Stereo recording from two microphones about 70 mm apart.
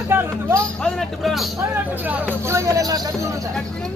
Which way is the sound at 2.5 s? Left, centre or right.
Right.